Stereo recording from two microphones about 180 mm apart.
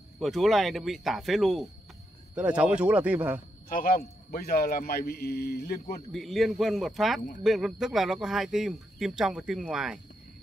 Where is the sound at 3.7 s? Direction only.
55° left (ahead or behind).